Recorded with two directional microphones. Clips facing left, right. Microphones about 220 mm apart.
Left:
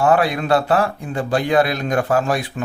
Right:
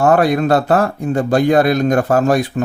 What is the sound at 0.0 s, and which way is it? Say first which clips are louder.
A man's voice: right 4 dB; 45° right (ahead or behind).